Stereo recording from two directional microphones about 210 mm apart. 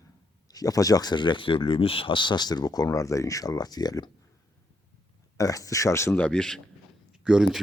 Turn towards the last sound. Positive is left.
turn(degrees=-5)  # may be behind; listen again after turning